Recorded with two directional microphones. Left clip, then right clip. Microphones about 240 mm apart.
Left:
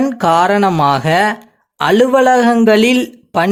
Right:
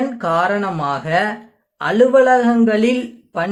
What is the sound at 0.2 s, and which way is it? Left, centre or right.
A man's voice, left.